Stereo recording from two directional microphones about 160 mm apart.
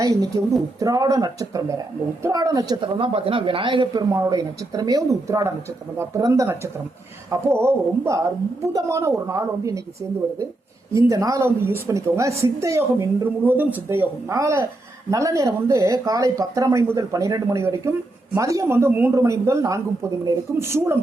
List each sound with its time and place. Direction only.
0.0 s a woman's voice: 20° right (ahead or behind)
10.9 s a woman's voice: 20° right (ahead or behind)